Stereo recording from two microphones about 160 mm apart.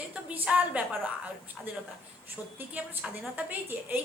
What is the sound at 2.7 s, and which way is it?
A woman's voice, 10° right (ahead or behind).